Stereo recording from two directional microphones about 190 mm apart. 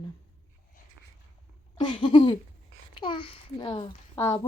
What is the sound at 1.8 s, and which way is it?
A woman's voice, 25° left (ahead or behind).